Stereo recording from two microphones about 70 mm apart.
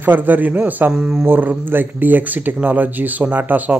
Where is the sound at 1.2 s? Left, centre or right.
Right.